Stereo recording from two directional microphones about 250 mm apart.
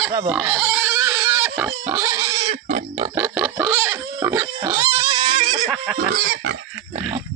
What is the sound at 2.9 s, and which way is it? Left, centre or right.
Pig, centre.